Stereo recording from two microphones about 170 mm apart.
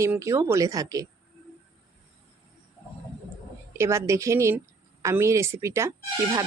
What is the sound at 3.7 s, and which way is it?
Speech, 15° right (ahead or behind).